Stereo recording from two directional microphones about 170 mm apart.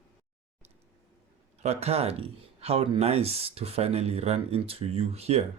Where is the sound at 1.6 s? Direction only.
40° right (ahead or behind).